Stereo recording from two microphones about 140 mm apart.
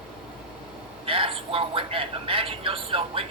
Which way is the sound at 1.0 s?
40° right (ahead or behind).